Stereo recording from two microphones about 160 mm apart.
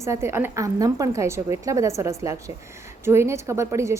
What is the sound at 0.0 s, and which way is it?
A woman's voice, 15° right (ahead or behind).